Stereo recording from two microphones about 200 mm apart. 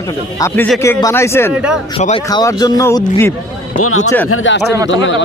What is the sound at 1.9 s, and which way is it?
Speech, 30° left (ahead or behind).